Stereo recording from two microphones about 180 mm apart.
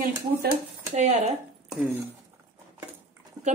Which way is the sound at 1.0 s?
40° right (ahead or behind).